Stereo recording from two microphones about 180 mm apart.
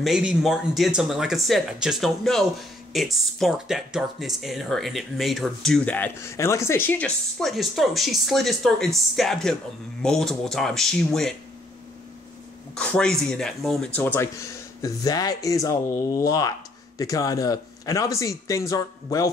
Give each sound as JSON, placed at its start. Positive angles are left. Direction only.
{"t": 0.0, "sound": "speech", "side_deg": -5}
{"t": 12.7, "sound": "speech", "side_deg": 5}